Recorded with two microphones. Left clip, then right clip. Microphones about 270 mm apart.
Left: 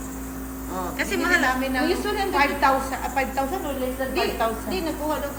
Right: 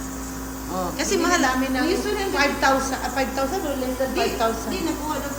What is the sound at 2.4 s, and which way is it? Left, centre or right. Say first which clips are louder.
Speech: even; left.